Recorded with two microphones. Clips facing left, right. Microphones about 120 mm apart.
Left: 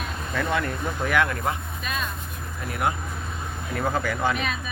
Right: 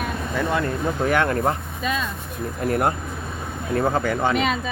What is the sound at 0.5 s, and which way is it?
Speech, 35° right (ahead or behind).